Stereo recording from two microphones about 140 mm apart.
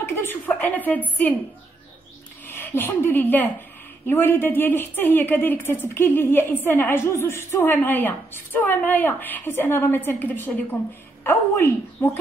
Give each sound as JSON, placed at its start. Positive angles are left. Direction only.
{"t": 0.0, "sound": "a sound", "side_deg": 15}
{"t": 0.6, "sound": "a woman's voice", "side_deg": 10}
{"t": 2.4, "sound": "a woman's voice", "side_deg": 15}